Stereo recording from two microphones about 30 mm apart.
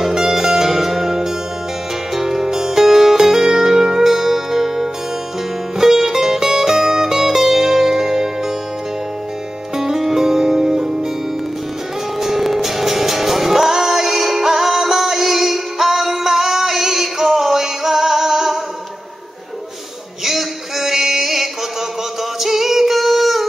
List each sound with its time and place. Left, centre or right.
0.0 s music: centre
9.8 s music: centre
12.2 s music: centre
20.2 s a sound: centre
22.4 s female singing: centre